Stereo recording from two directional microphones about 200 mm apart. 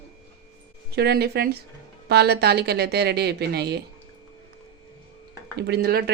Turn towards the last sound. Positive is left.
turn(degrees=-50)  # may be behind; listen again after turning